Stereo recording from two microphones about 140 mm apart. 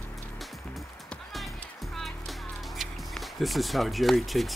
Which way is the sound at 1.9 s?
Centre (ahead or behind).